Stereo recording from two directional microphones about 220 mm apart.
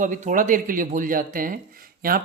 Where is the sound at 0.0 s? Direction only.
35° right (ahead or behind).